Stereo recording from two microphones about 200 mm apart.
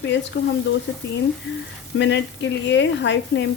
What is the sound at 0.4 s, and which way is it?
Speech, 55° left (ahead or behind).